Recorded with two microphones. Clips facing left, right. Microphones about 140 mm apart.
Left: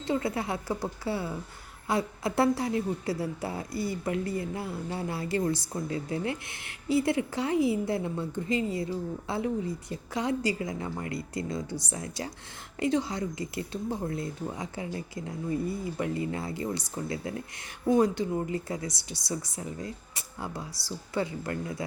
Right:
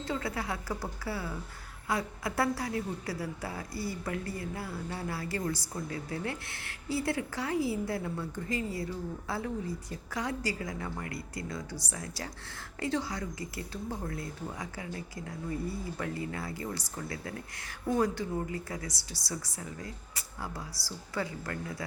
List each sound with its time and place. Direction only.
0.0 s a woman's voice: 25° left (ahead or behind)